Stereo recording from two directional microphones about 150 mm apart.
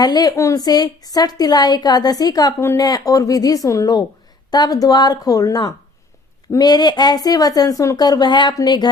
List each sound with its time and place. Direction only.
0.0 s a woman's voice: 25° left (ahead or behind)